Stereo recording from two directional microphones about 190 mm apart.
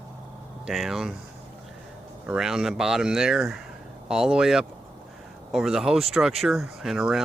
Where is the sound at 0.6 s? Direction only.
Centre (ahead or behind).